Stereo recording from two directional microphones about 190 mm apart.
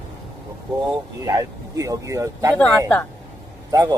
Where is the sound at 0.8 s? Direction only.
15° right (ahead or behind).